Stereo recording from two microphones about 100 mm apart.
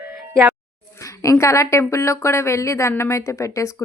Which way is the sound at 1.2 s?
30° left (ahead or behind).